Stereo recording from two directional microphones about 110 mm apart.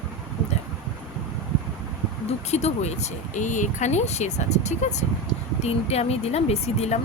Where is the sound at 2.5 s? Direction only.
85° left.